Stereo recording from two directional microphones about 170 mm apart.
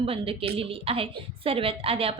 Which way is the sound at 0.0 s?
30° right (ahead or behind).